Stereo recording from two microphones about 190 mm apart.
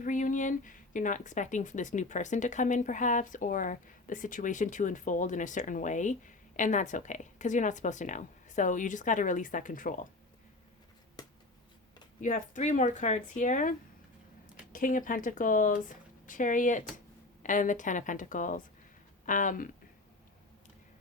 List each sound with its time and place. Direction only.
0.0 s speech: 45° left (ahead or behind)
12.2 s a woman's voice: 40° left (ahead or behind)